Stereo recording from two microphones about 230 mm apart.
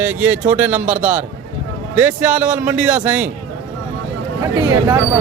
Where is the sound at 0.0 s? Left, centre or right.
Centre.